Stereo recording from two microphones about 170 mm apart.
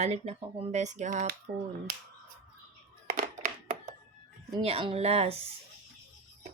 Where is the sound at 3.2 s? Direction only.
60° right (ahead or behind).